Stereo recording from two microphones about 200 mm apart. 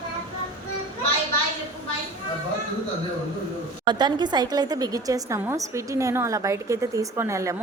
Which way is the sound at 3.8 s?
20° right (ahead or behind).